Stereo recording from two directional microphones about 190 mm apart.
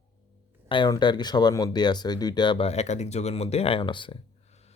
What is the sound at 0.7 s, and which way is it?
Speech, 25° left (ahead or behind).